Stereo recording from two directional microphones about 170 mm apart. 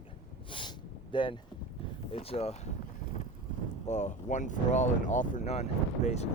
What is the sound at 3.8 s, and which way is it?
Speech, 45° left (ahead or behind).